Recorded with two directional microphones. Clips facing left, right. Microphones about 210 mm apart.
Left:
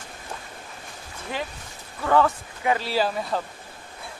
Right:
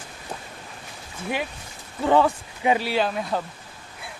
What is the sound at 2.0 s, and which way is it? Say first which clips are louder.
Speech: right 2 dB; 20° right (ahead or behind).